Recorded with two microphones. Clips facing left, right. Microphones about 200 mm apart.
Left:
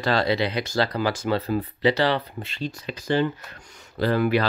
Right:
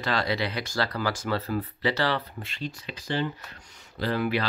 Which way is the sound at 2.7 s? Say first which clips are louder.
Left 8 dB; 45° left (ahead or behind).